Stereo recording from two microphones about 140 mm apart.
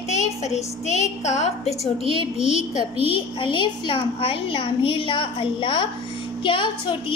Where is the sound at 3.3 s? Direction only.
35° left (ahead or behind).